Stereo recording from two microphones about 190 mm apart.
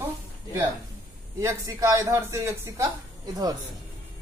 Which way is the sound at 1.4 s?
15° right (ahead or behind).